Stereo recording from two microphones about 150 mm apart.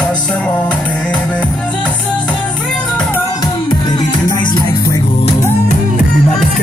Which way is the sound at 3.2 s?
25° left (ahead or behind).